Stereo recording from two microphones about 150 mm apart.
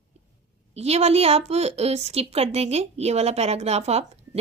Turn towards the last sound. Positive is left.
turn(degrees=-45)  # may be behind; listen again after turning